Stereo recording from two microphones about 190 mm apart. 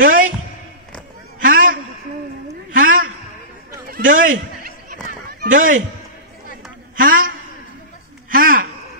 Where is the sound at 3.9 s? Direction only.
45° right (ahead or behind).